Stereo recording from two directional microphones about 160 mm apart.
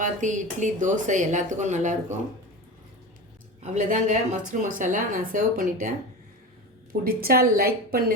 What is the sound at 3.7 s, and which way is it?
A woman's voice, 50° right (ahead or behind).